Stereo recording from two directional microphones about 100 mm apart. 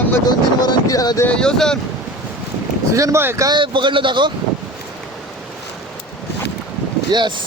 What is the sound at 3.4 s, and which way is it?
Speech, 50° right (ahead or behind).